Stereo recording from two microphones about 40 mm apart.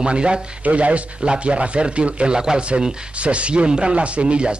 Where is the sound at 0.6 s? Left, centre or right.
Right; by 2.9 s centre.